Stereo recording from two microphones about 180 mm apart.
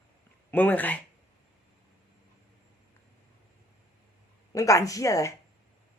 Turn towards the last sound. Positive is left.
turn(degrees=15)  # may be behind; listen again after turning